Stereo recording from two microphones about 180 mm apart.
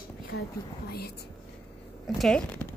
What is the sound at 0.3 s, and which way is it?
Speech, 70° left (ahead or behind).